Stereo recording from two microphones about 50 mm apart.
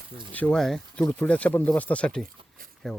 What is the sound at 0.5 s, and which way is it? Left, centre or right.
Speech, centre.